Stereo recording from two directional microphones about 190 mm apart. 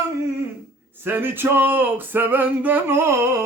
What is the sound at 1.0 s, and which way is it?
Male singing, 10° right (ahead or behind).